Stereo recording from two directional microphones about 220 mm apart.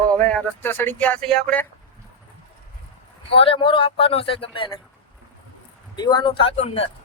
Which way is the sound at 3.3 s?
25° left (ahead or behind).